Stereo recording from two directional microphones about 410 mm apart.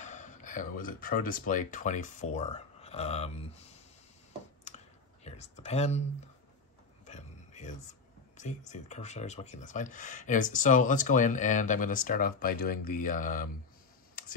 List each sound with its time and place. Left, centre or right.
0.0 s speech: centre
4.6 s clicking: centre
7.1 s a sound: centre
8.4 s speech: centre